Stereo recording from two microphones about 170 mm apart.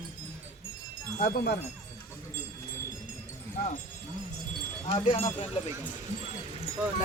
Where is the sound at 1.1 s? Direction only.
65° left (ahead or behind).